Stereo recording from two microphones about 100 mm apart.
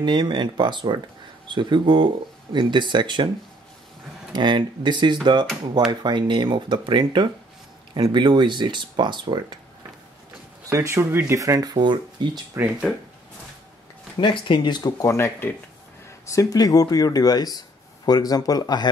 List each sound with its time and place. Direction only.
0.0 s speech: 50° right (ahead or behind)
4.3 s speech: 50° right (ahead or behind)
10.7 s speech: 30° right (ahead or behind); by 12.3 s 50° right (ahead or behind)
12.6 s speech: 25° right (ahead or behind)
14.1 s speech: 55° left (ahead or behind)
15.0 s speech: 25° left (ahead or behind)